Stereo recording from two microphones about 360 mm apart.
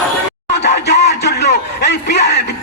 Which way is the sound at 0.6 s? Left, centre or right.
Left.